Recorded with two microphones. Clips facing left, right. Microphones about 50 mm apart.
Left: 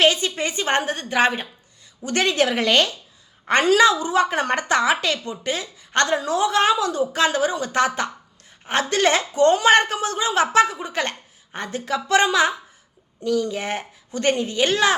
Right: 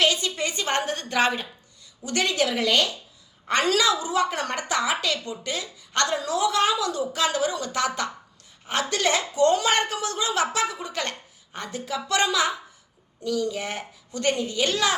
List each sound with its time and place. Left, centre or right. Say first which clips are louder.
0.0 s a woman's voice: left 4 dB; left
2.0 s speech: left 4 dB; left
3.6 s a woman's voice: left 6 dB; left